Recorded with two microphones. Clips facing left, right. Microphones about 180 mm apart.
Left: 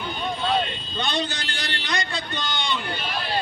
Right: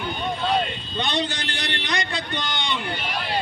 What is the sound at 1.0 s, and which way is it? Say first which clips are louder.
A man's voice: right 1 dB; 20° right (ahead or behind).